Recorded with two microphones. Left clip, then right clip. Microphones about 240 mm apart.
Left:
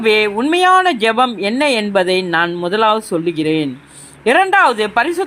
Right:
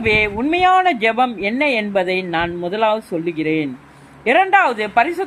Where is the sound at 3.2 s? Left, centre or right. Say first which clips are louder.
Left 2 dB; centre.